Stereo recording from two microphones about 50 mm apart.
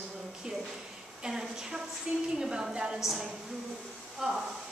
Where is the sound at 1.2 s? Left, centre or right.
Centre.